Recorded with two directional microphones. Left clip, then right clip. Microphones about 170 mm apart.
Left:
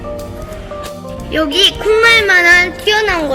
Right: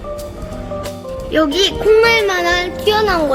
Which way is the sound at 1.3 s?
30° right (ahead or behind).